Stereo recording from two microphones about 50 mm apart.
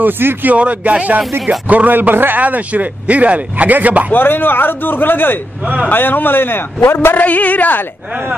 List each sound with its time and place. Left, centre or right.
0.0 s a man's voice: right
0.6 s a man's voice: right
4.1 s a man's voice: left
7.2 s speech: left